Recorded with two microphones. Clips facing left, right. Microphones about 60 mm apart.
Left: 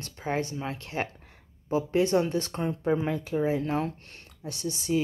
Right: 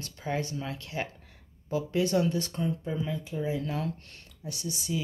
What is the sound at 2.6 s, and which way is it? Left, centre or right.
Speech, left.